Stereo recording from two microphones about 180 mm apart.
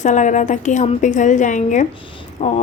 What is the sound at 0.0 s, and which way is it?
A woman's voice, 40° left (ahead or behind).